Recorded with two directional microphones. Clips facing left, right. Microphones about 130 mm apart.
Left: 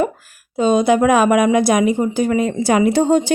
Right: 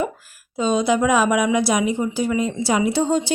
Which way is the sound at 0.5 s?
50° left (ahead or behind).